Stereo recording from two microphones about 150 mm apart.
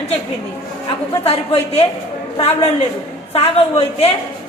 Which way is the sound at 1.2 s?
45° left (ahead or behind).